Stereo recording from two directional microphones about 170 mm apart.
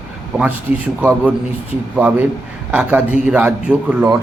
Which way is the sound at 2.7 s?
10° right (ahead or behind).